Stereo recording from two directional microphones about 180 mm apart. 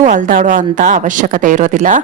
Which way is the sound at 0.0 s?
45° right (ahead or behind).